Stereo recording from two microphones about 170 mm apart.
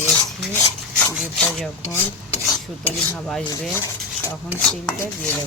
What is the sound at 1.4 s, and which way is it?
Cutlery, 5° left (ahead or behind).